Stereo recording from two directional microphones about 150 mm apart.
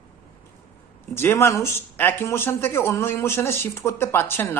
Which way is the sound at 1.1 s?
15° left (ahead or behind).